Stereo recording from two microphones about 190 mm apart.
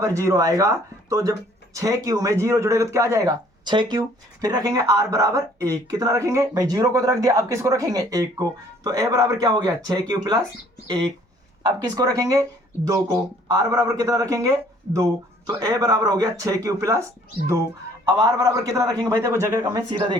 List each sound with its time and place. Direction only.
0.0 s speech: 15° right (ahead or behind)
11.6 s a man's voice: 20° right (ahead or behind)
18.0 s speech: 20° right (ahead or behind)